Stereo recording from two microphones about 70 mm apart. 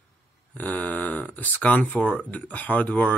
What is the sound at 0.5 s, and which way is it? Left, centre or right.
Speech, left.